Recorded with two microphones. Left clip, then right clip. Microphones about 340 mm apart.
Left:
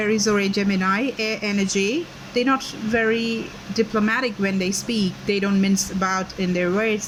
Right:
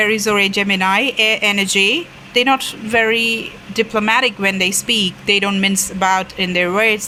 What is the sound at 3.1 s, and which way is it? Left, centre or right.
Speech, right.